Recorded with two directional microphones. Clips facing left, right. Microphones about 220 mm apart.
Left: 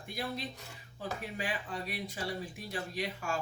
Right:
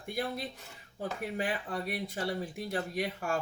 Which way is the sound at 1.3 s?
55° right (ahead or behind).